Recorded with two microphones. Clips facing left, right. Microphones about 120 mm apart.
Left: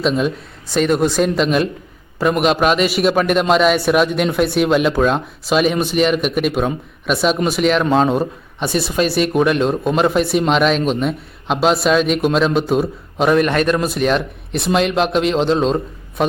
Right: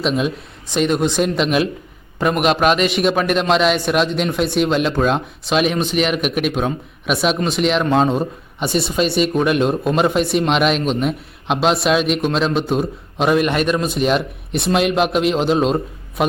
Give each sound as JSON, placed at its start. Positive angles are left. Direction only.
{"t": 0.0, "sound": "a man's voice", "side_deg": 0}